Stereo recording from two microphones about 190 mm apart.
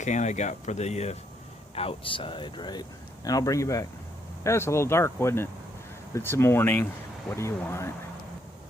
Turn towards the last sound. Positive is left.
turn(degrees=15)  # may be behind; listen again after turning